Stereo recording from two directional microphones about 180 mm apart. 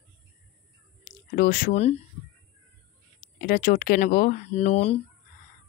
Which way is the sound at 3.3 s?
50° left (ahead or behind).